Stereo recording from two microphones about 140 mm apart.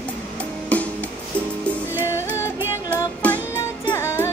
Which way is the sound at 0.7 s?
10° left (ahead or behind).